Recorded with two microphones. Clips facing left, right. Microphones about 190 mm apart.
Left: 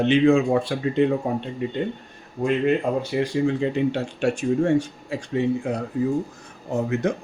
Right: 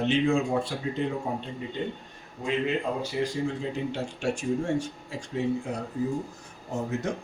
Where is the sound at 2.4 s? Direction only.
60° left (ahead or behind).